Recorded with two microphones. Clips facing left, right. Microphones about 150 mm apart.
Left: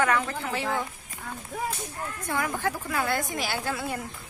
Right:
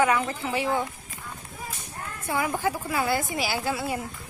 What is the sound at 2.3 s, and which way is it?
Speech, 10° right (ahead or behind).